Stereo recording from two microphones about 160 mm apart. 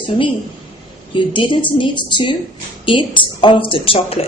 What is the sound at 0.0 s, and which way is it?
A woman's voice, 30° left (ahead or behind).